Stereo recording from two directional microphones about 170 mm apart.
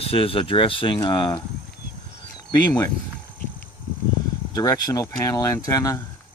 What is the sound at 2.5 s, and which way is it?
Speech, 25° left (ahead or behind).